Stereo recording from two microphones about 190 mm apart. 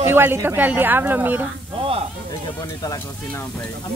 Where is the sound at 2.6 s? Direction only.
20° left (ahead or behind).